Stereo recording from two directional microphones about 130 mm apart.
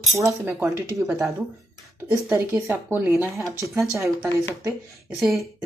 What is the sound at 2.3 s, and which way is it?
Speech, 15° right (ahead or behind).